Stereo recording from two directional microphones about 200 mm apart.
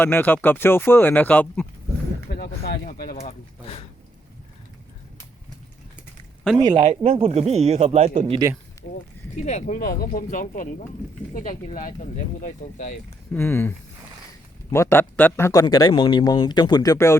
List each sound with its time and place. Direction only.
0.0 s speech: 10° left (ahead or behind)
2.3 s speech: 50° left (ahead or behind)
6.7 s speech: 30° right (ahead or behind)
8.8 s a sound: 45° left (ahead or behind)
9.4 s speech: 35° left (ahead or behind)
9.9 s speech: 45° left (ahead or behind)
13.3 s speech: 10° left (ahead or behind)